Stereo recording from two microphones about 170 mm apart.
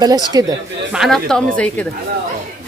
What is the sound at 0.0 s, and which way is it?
Speech, 25° right (ahead or behind).